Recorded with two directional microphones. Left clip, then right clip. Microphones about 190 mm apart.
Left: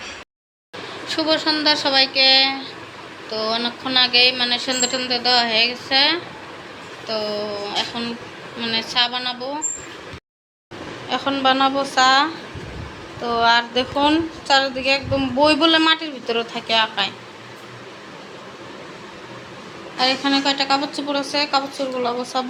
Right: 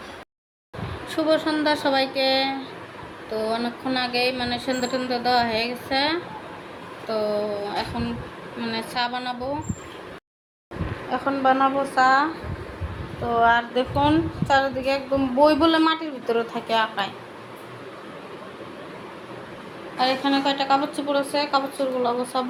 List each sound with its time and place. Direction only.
1.0 s a woman's voice: 10° right (ahead or behind)
11.1 s a woman's voice: centre (ahead or behind)
13.2 s a woman's voice: 10° left (ahead or behind)
20.0 s a woman's voice: 5° left (ahead or behind)